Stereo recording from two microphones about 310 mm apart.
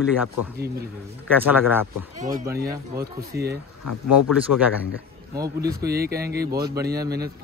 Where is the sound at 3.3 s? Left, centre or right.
Right.